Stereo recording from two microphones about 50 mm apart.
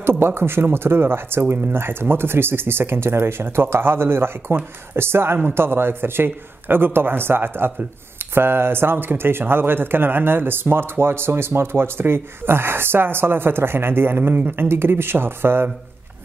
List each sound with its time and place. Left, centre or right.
0.0 s speech: right